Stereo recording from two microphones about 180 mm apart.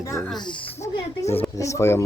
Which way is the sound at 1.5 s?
15° left (ahead or behind).